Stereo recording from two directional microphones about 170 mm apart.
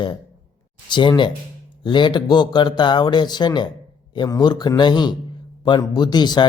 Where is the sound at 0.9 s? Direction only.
25° left (ahead or behind).